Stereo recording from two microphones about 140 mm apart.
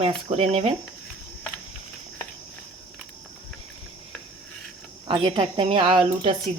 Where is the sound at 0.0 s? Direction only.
45° right (ahead or behind).